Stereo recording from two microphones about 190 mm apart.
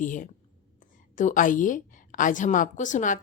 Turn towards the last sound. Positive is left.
turn(degrees=40)  # may be behind; listen again after turning